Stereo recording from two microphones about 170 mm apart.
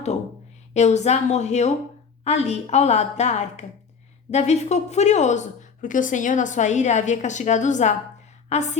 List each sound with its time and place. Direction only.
0.7 s a woman's voice: 40° left (ahead or behind)